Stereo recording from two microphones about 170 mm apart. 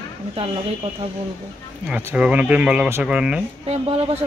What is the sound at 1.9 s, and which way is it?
Speech, 5° right (ahead or behind).